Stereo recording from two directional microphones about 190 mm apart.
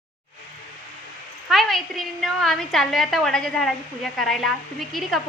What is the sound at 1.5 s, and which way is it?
A woman's voice, centre (ahead or behind).